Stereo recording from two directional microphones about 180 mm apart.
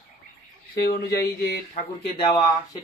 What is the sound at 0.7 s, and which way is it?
Speech, 65° left (ahead or behind).